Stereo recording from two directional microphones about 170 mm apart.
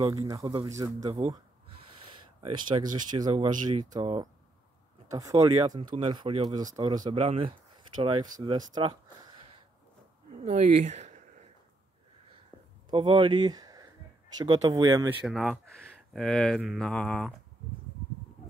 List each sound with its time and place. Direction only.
0.0 s speech: 20° right (ahead or behind)
2.4 s speech: 25° right (ahead or behind)
10.4 s a sound: 45° right (ahead or behind)
12.9 s speech: 30° right (ahead or behind)
15.2 s speech: centre (ahead or behind)